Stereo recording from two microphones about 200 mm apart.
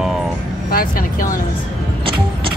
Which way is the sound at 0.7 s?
45° left (ahead or behind).